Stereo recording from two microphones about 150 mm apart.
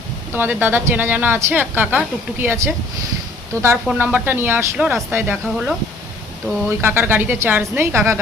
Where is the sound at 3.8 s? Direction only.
10° right (ahead or behind).